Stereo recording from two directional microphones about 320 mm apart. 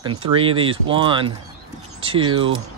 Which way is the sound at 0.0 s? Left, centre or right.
Centre.